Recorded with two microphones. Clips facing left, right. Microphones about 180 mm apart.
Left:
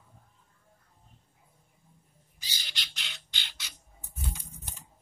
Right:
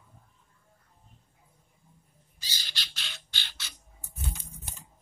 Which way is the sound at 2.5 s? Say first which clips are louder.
Right 1 dB; 15° left (ahead or behind).